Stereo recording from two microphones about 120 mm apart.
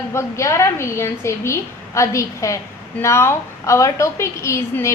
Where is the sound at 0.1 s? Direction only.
25° left (ahead or behind).